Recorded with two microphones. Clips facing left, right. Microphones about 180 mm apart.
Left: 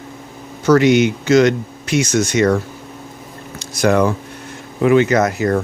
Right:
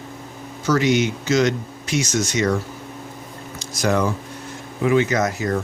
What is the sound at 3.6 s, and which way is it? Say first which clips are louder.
Speech: left 6 dB; 60° left (ahead or behind).